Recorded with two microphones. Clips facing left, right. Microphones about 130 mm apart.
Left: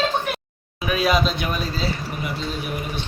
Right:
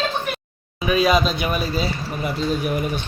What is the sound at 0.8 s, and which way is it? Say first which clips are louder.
Speech: right 3 dB; centre (ahead or behind).